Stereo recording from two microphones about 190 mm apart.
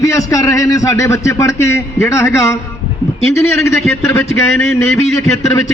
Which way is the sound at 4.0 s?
15° left (ahead or behind).